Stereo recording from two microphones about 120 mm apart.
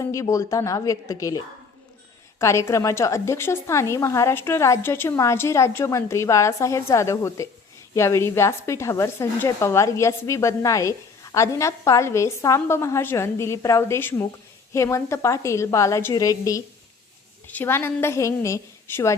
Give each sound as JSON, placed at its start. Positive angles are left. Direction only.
{"t": 0.0, "sound": "speech", "side_deg": 25}
{"t": 2.4, "sound": "speech", "side_deg": 25}